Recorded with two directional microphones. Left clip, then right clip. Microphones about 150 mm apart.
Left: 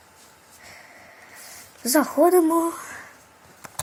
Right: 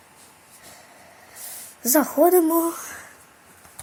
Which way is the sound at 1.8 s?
15° right (ahead or behind).